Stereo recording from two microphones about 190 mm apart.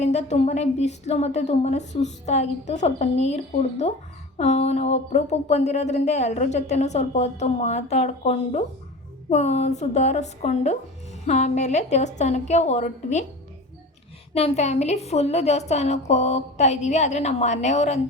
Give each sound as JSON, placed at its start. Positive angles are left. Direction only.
{"t": 0.0, "sound": "speech", "side_deg": 35}
{"t": 14.3, "sound": "speech", "side_deg": 35}